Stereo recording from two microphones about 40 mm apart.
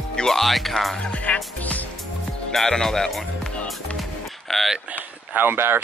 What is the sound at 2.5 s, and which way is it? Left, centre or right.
Speech, centre.